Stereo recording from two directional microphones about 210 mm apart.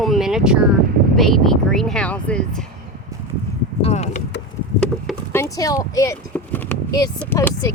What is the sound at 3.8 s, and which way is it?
Speech, 30° left (ahead or behind).